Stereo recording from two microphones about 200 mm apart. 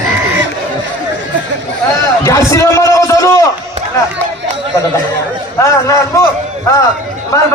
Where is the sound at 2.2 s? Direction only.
15° left (ahead or behind).